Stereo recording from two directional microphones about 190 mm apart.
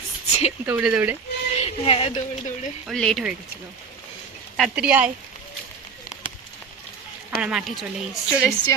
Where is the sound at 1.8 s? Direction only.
30° left (ahead or behind).